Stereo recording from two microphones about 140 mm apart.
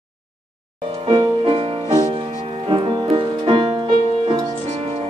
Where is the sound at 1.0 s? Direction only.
40° right (ahead or behind).